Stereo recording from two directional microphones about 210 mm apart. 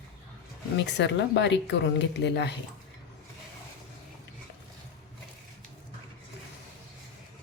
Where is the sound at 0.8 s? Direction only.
55° left (ahead or behind).